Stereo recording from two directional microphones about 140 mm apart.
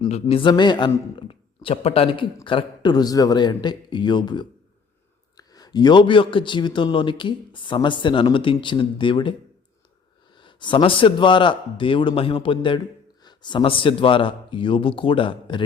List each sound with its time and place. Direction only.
0.1 s speech: 45° left (ahead or behind)
10.4 s speech: 35° left (ahead or behind)